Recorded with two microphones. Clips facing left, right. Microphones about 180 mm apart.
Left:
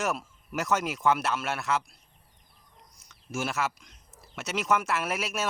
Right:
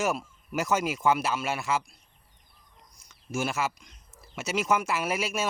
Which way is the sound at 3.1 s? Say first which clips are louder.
Right 2 dB; centre (ahead or behind).